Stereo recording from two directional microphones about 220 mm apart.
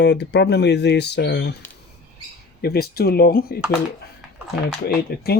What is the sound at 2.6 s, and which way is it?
Speech, 45° left (ahead or behind).